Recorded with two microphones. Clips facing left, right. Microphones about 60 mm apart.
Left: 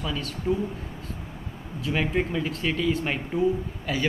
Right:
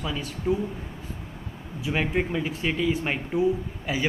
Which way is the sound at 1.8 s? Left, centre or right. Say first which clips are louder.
Even; centre.